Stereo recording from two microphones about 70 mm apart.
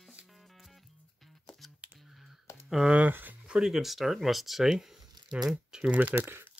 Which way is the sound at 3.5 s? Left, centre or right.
Centre.